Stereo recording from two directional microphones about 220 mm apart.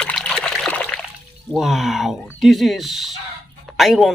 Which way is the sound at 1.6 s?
Centre (ahead or behind).